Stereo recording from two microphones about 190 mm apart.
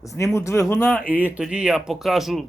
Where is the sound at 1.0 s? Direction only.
5° right (ahead or behind).